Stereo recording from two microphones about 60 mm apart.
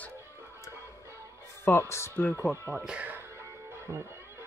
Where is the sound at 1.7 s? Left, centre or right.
Left.